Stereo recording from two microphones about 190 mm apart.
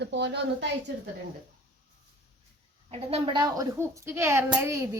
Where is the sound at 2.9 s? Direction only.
30° right (ahead or behind).